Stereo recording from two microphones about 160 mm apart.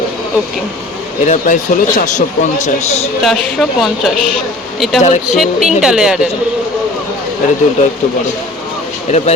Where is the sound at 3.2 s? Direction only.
Centre (ahead or behind).